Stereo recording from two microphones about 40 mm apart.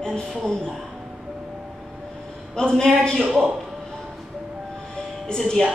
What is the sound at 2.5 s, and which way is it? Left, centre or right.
Speech, centre.